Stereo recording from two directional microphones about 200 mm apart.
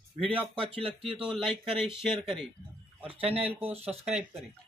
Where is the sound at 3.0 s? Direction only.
30° right (ahead or behind).